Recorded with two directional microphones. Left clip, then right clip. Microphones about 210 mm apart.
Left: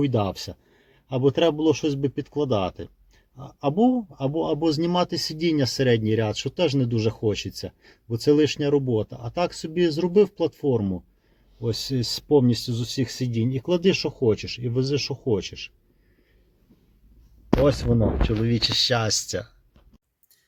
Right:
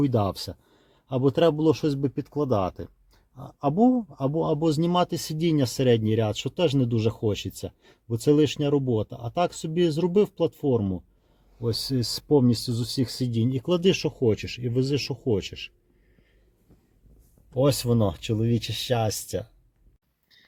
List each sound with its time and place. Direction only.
0.0 s speech: 30° right (ahead or behind)
18.4 s speech: 15° right (ahead or behind)